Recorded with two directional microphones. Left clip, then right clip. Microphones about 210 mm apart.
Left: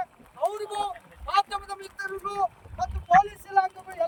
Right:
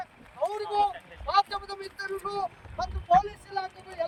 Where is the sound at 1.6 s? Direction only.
35° left (ahead or behind).